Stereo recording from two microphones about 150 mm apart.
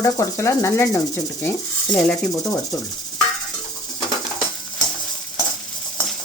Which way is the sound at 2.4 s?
25° left (ahead or behind).